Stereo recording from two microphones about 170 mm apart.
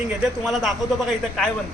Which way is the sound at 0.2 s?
Centre (ahead or behind).